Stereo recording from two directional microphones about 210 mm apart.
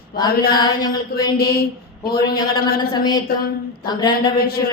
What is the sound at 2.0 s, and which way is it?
Mantra, 45° left (ahead or behind).